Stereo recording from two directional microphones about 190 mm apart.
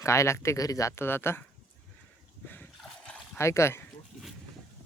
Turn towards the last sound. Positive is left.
turn(degrees=15)  # may be behind; listen again after turning